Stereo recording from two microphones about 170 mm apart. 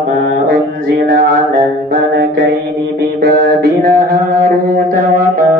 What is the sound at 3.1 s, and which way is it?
Mantra, 65° right (ahead or behind).